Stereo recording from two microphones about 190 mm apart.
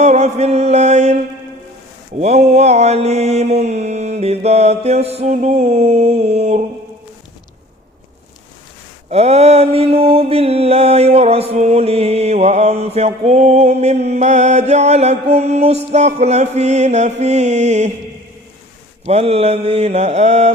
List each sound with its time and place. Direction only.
0.0 s mantra: 35° right (ahead or behind)
9.0 s mantra: 35° right (ahead or behind)
19.0 s mantra: 30° right (ahead or behind)